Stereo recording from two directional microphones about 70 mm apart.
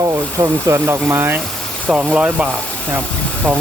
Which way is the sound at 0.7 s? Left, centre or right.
Right.